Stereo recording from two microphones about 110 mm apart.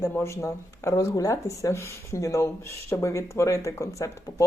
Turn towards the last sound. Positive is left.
turn(degrees=25)  # may be behind; listen again after turning